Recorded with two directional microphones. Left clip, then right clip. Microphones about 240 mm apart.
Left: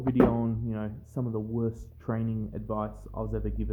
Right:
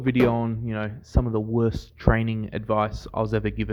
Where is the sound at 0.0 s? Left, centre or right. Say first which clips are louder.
Right 3 dB; right.